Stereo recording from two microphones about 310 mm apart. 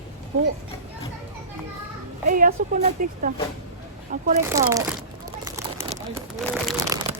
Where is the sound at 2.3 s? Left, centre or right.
Right.